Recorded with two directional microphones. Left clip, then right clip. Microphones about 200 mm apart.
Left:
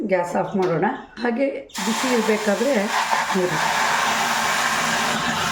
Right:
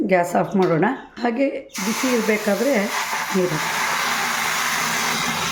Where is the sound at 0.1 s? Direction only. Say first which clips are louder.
Right 2 dB; 20° right (ahead or behind).